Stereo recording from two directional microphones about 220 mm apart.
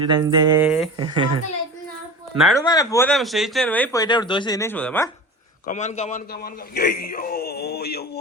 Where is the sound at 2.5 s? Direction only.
15° left (ahead or behind).